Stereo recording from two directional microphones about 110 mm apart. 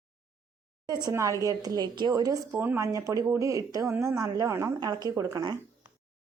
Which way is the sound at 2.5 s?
20° right (ahead or behind).